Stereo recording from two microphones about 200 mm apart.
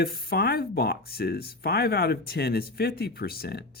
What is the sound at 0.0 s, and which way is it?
Speech, 50° left (ahead or behind).